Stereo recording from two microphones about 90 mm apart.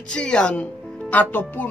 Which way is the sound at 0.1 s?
10° left (ahead or behind).